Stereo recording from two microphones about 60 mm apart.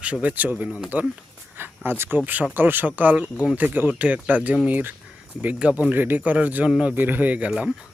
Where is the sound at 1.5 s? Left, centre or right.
Right.